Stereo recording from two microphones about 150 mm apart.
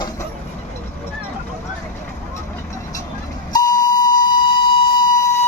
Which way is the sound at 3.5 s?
25° left (ahead or behind).